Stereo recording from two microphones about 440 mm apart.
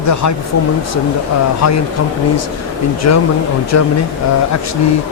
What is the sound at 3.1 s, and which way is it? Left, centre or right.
Speech, left.